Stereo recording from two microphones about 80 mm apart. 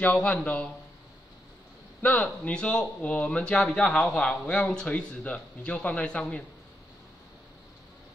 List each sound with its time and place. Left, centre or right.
0.0 s speech: centre
2.0 s speech: centre